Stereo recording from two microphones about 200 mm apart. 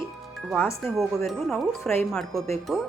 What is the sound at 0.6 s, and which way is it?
Speech, 10° left (ahead or behind).